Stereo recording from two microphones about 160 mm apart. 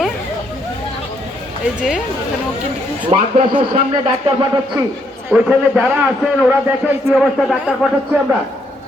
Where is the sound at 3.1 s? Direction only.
40° right (ahead or behind).